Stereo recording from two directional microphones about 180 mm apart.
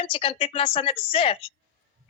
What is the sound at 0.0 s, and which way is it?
A woman's voice, 30° left (ahead or behind).